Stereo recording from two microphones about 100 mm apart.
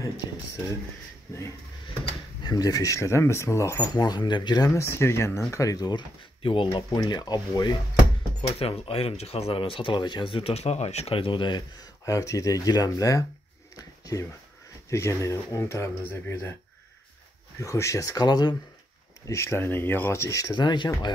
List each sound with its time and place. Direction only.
2.4 s speech: 40° left (ahead or behind)
3.9 s speech: 45° left (ahead or behind)
4.8 s speech: 25° left (ahead or behind); by 6.8 s 60° left (ahead or behind)
6.9 s speech: 45° left (ahead or behind)
8.5 s speech: 75° left (ahead or behind); by 13.2 s 35° left (ahead or behind)
13.7 s a sound: 35° left (ahead or behind)
14.9 s speech: 30° left (ahead or behind)
17.6 s speech: 30° left (ahead or behind)
18.2 s speech: 45° left (ahead or behind)
19.2 s speech: 30° left (ahead or behind); by 21.1 s 50° left (ahead or behind)